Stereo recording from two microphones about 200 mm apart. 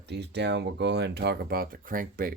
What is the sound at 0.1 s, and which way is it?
Speech, 55° right (ahead or behind).